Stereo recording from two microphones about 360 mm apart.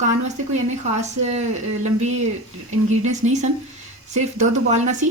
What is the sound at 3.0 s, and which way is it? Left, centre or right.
A woman's voice, centre.